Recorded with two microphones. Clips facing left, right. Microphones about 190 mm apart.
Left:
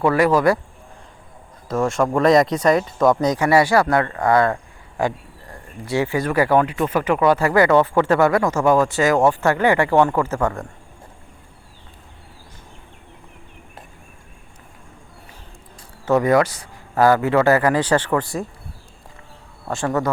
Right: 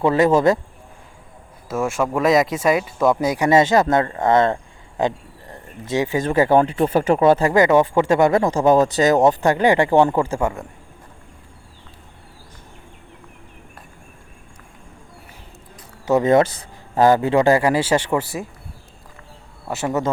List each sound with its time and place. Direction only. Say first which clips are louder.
0.0 s speech: right 1 dB; 20° right (ahead or behind)
1.6 s speech: left 2 dB; 5° right (ahead or behind)
16.0 s speech: right 1 dB; 20° right (ahead or behind); by 18.4 s 5° right (ahead or behind)
19.6 s a man's voice: left 1 dB; 5° right (ahead or behind)